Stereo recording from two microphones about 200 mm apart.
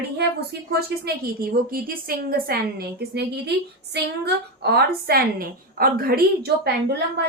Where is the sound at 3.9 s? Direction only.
55° right (ahead or behind).